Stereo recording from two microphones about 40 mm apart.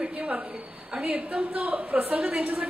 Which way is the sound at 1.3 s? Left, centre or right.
Right.